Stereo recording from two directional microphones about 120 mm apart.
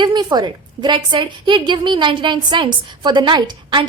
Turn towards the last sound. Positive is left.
turn(degrees=-40)  # may be behind; listen again after turning